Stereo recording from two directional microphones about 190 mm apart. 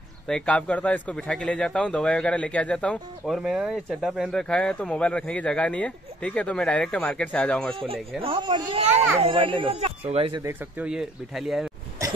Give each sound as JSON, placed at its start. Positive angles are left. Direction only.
{"t": 0.3, "sound": "speech", "side_deg": 5}
{"t": 8.2, "sound": "speech", "side_deg": -25}
{"t": 10.4, "sound": "speech", "side_deg": -10}